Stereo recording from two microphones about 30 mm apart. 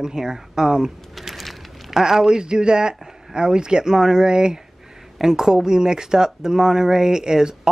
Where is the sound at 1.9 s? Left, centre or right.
Centre.